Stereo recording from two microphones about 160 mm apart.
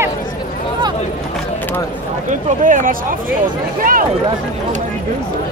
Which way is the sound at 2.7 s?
55° right (ahead or behind).